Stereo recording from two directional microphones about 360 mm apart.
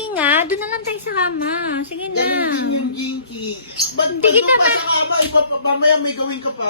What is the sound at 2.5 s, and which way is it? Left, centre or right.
Speech, left.